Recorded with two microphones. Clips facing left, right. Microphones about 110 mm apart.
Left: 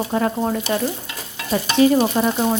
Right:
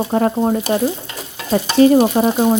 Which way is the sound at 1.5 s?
40° right (ahead or behind).